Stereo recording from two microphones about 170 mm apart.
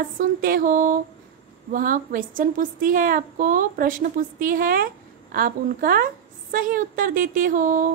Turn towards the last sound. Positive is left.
turn(degrees=-50)  # may be behind; listen again after turning